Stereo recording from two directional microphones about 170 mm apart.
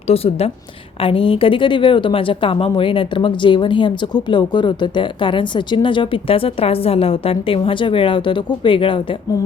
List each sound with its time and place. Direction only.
0.1 s a woman's voice: 35° left (ahead or behind)